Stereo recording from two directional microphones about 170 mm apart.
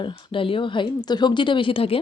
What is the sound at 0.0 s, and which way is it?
Speech, 30° left (ahead or behind).